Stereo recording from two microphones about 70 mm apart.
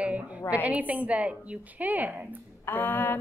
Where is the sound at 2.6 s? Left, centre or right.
Left.